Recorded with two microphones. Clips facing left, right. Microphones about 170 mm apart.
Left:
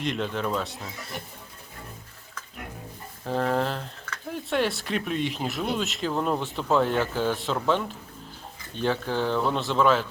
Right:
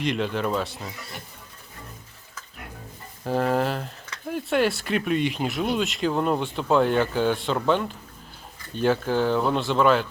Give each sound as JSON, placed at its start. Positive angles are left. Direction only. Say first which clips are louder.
{"t": 0.0, "sound": "speech", "louder": "right 3 dB", "side_deg": 0}
{"t": 3.2, "sound": "speech", "louder": "right 2 dB", "side_deg": -5}